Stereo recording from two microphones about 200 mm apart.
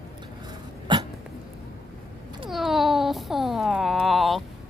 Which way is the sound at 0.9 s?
25° right (ahead or behind).